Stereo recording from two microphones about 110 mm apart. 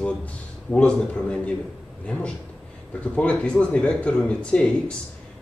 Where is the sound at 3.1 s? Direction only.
10° left (ahead or behind).